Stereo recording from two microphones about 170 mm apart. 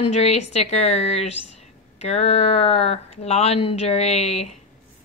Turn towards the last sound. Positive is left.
turn(degrees=40)  # may be behind; listen again after turning